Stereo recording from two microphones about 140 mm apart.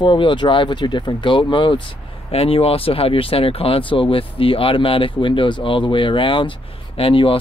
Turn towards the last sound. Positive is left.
turn(degrees=40)  # may be behind; listen again after turning